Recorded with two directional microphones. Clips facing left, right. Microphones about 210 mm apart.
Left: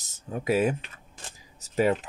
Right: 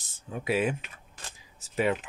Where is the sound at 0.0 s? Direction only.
40° left (ahead or behind).